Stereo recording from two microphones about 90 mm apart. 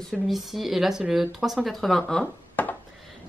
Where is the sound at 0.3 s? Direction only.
Centre (ahead or behind).